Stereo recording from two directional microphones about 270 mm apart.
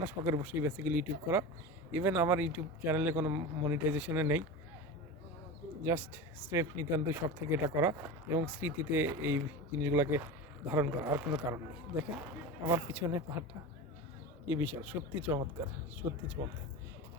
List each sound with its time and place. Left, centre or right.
0.0 s speech: centre
5.8 s speech: centre
12.6 s speech: centre
14.4 s speech: centre
16.4 s speech: centre